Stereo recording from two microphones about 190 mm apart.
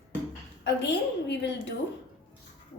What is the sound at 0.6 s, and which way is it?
Speech, 65° left (ahead or behind).